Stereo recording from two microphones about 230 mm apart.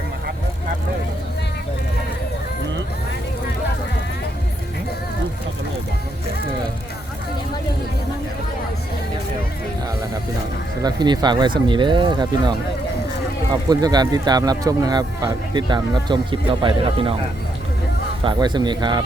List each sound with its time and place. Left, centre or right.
10.8 s speech: centre
13.7 s speech: centre
18.2 s speech: centre